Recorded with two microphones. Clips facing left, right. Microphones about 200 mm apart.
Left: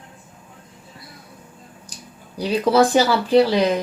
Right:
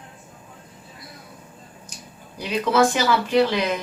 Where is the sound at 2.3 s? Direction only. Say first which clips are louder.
Left 4 dB; 35° left (ahead or behind).